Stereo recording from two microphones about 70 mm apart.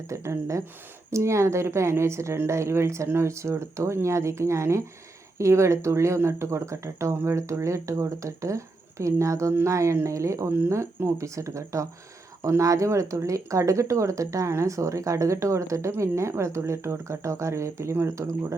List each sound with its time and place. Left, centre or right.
0.1 s speech: right